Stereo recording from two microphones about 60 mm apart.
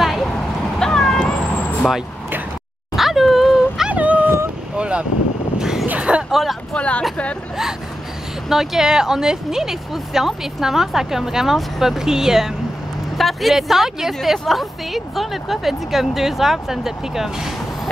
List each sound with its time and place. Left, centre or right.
0.0 s a sound: centre
0.7 s cat: centre
3.0 s dog: centre
3.9 s dog: right
4.7 s vehicle: centre
5.6 s a sound: centre
6.7 s speech: centre
8.5 s speech: centre